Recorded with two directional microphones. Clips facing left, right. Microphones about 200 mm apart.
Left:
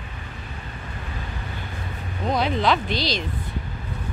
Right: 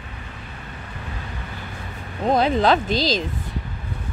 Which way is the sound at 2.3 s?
45° right (ahead or behind).